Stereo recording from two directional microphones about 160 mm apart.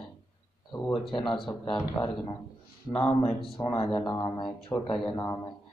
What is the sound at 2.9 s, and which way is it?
Speech, 35° left (ahead or behind).